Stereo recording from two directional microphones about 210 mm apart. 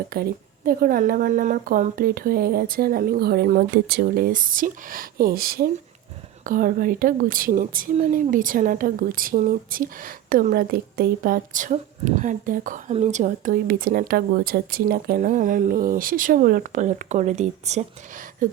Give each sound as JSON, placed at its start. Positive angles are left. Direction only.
{"t": 0.1, "sound": "speech", "side_deg": -45}